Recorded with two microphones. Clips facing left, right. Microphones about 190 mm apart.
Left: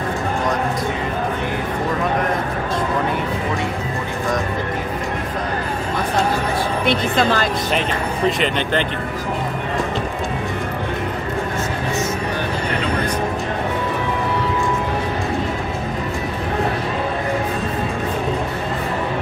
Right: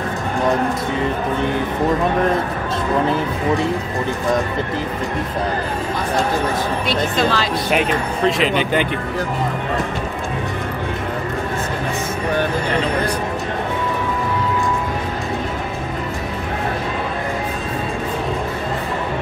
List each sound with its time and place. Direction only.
6.9 s speech: 55° left (ahead or behind)
8.3 s speech: 5° right (ahead or behind)